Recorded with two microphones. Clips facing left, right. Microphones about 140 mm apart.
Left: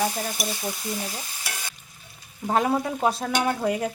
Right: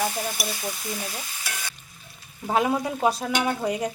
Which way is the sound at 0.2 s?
5° right (ahead or behind).